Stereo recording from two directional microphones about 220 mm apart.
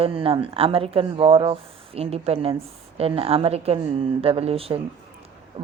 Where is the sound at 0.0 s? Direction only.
25° right (ahead or behind).